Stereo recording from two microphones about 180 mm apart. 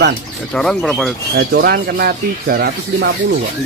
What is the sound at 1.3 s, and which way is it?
Speech, 60° right (ahead or behind).